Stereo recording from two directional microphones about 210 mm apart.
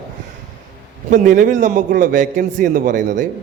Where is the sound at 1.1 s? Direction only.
40° right (ahead or behind).